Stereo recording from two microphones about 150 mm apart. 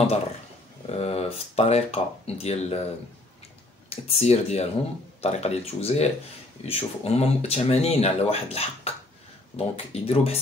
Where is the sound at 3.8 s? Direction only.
45° left (ahead or behind).